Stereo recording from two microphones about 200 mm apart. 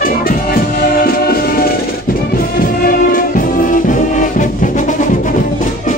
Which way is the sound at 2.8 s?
45° left (ahead or behind).